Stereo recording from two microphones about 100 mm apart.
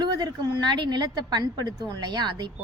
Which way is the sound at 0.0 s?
45° right (ahead or behind).